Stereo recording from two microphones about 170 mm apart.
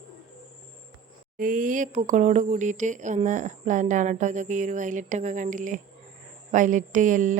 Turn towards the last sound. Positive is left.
turn(degrees=-50)  # may be behind; listen again after turning